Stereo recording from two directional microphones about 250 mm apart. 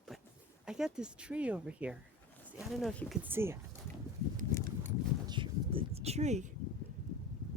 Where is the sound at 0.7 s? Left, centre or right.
Centre.